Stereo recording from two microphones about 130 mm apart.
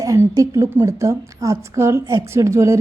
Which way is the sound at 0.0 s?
25° right (ahead or behind).